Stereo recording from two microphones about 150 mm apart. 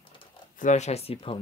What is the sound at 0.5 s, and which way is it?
Speech, 55° left (ahead or behind).